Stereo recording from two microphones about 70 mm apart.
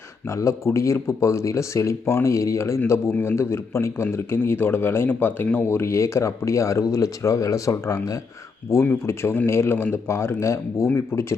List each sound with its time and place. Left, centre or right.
0.3 s a man's voice: left
5.6 s speech: left
9.0 s a man's voice: left